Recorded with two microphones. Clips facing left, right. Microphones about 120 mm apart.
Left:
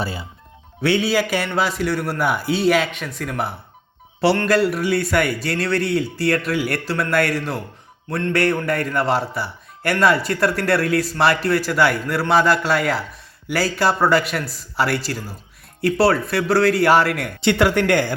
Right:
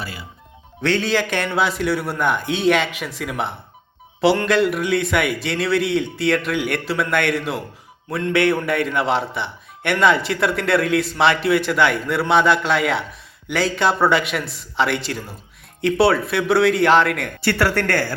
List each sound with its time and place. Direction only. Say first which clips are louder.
0.0 s speech: left 6 dB; 30° left (ahead or behind)
0.8 s a man's voice: left 1 dB; 10° left (ahead or behind)
17.4 s speech: left 3 dB; 15° left (ahead or behind)